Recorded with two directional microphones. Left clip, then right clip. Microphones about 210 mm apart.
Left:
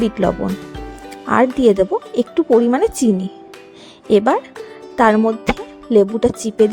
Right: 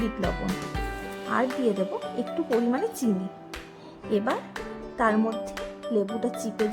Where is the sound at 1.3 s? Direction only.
45° left (ahead or behind).